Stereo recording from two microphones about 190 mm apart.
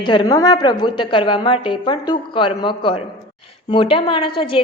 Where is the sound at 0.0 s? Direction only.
25° left (ahead or behind).